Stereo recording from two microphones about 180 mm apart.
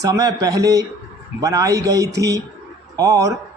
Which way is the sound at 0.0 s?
20° right (ahead or behind).